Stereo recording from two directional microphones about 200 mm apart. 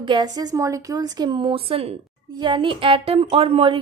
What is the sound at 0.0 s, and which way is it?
A woman's voice, 25° right (ahead or behind).